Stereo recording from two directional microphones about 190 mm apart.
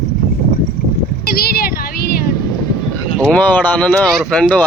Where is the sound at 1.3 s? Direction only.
55° left (ahead or behind).